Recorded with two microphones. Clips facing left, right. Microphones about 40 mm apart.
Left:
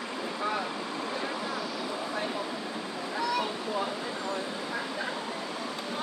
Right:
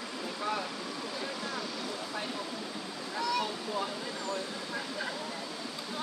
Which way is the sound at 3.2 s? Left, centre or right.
Centre.